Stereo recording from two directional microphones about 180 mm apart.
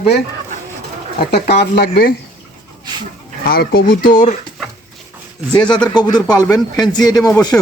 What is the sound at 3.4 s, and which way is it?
Speech, 55° left (ahead or behind).